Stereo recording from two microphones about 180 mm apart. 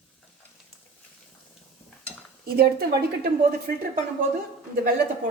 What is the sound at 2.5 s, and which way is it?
Speech, 60° right (ahead or behind).